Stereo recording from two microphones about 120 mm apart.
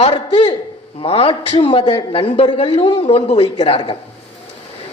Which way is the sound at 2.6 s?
60° left (ahead or behind).